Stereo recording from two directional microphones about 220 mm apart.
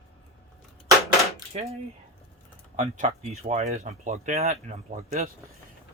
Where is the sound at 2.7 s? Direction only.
35° right (ahead or behind).